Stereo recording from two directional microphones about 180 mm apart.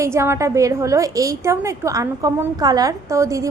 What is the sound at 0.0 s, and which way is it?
A woman's voice, 15° right (ahead or behind).